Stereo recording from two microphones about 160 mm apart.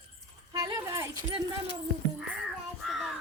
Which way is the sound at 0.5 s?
20° right (ahead or behind).